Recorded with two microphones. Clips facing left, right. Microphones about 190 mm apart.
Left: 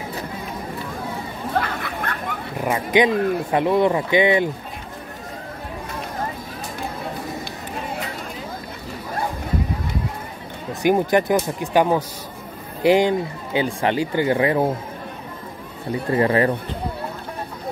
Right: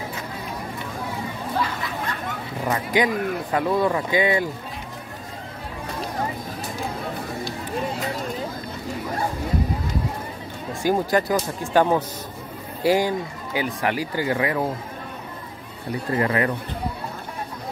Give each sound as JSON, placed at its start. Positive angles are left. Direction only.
{"t": 1.6, "sound": "a sound", "side_deg": 60}
{"t": 2.6, "sound": "speech", "side_deg": 20}
{"t": 10.7, "sound": "speech", "side_deg": 20}
{"t": 16.1, "sound": "speech", "side_deg": 30}